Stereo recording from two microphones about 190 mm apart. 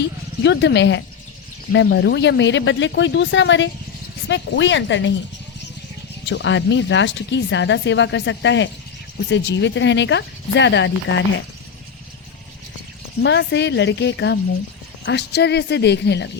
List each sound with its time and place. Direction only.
0.0 s speech: 65° left (ahead or behind)
6.2 s speech: 80° left
13.2 s speech: 65° left (ahead or behind)